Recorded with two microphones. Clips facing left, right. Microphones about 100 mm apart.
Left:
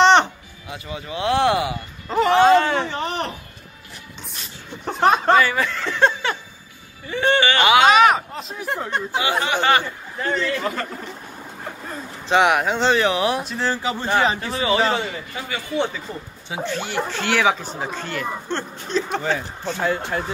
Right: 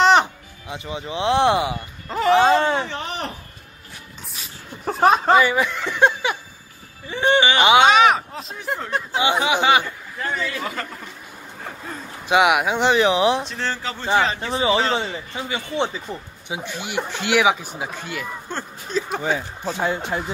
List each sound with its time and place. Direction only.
0.0 s music: 5° right (ahead or behind)
0.7 s speech: 20° right (ahead or behind)
2.0 s speech: centre (ahead or behind)
2.4 s speech: 25° right (ahead or behind)
2.8 s speech: centre (ahead or behind)
4.3 s a sound: centre (ahead or behind)
7.1 s speech: 20° right (ahead or behind)
7.8 s speech: centre (ahead or behind)
9.2 s speech: 15° right (ahead or behind)
10.2 s speech: 5° right (ahead or behind)
11.6 s a sound: centre (ahead or behind)
12.3 s speech: 10° right (ahead or behind)
13.4 s speech: 5° left (ahead or behind)
14.4 s speech: 25° right (ahead or behind)